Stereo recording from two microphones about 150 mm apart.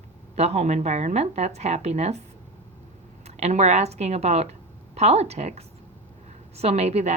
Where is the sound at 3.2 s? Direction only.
50° right (ahead or behind).